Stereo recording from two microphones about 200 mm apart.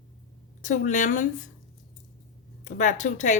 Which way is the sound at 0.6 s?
40° left (ahead or behind).